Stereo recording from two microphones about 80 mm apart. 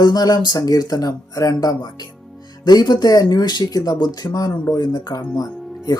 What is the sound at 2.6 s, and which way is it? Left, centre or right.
Speech, left.